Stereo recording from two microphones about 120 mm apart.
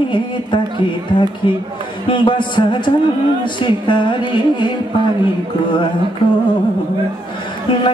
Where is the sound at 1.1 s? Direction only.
40° left (ahead or behind).